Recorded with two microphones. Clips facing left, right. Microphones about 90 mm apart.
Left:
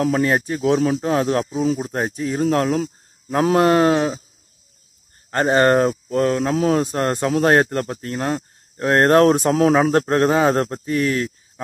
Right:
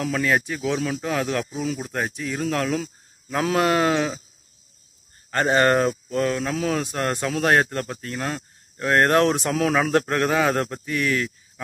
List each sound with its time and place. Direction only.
0.0 s speech: 35° left (ahead or behind)
5.3 s speech: 30° left (ahead or behind)